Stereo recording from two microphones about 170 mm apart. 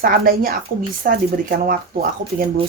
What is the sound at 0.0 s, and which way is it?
Speech, 60° right (ahead or behind).